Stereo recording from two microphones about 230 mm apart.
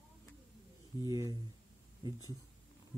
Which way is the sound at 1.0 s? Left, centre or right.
Centre.